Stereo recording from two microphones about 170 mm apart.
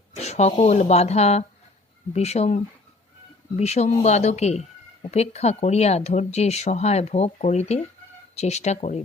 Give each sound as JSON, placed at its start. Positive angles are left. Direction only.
{"t": 0.2, "sound": "speech", "side_deg": 40}